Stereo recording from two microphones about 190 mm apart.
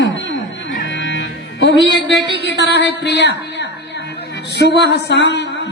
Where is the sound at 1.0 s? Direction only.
70° left (ahead or behind).